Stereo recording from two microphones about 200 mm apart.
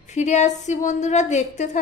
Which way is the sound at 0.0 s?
35° left (ahead or behind).